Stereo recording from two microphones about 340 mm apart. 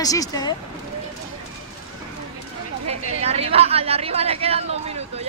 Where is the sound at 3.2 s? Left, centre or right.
Centre.